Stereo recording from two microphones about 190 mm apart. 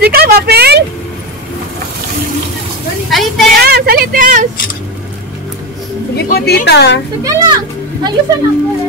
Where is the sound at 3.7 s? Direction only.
55° right (ahead or behind).